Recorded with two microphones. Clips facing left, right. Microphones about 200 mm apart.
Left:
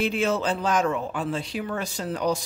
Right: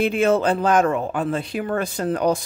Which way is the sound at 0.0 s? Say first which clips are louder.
Right 6 dB; 55° right (ahead or behind).